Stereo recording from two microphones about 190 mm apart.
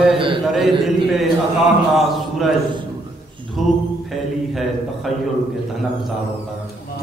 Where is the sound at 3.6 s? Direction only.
Centre (ahead or behind).